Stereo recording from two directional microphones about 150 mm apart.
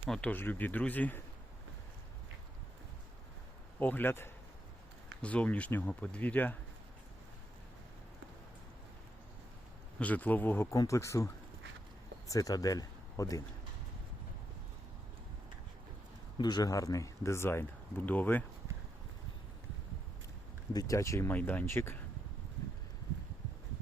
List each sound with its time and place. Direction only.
0.1 s speech: 10° left (ahead or behind)
3.8 s speech: 10° left (ahead or behind)
10.0 s speech: 10° left (ahead or behind)
12.3 s speech: 25° left (ahead or behind)
16.4 s speech: 25° left (ahead or behind); by 18.4 s 10° left (ahead or behind)
20.7 s speech: 20° left (ahead or behind)